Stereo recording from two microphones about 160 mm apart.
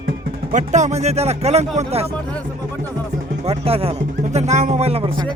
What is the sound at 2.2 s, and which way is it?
Speech, 10° left (ahead or behind).